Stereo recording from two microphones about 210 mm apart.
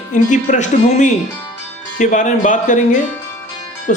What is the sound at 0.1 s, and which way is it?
Speech, 35° left (ahead or behind).